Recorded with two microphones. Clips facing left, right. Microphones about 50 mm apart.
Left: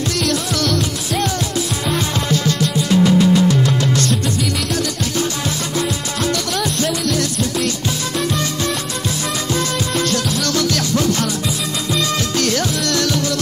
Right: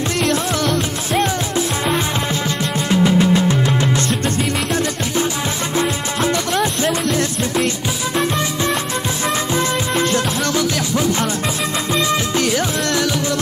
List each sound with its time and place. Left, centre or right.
0.2 s music: right
5.8 s music: right
9.5 s music: right